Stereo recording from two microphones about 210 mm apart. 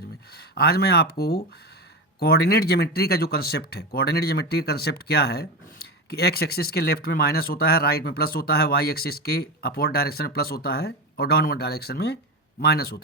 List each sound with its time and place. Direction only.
0.3 s speech: 50° left (ahead or behind)